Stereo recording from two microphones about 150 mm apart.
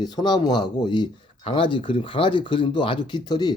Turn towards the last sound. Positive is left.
turn(degrees=30)  # may be behind; listen again after turning